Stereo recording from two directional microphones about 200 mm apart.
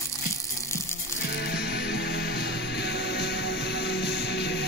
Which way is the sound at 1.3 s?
55° left (ahead or behind).